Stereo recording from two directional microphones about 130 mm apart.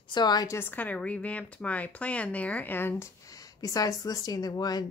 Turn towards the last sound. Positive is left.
turn(degrees=30)  # may be behind; listen again after turning